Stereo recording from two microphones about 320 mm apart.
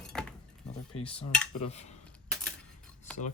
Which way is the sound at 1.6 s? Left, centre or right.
Centre.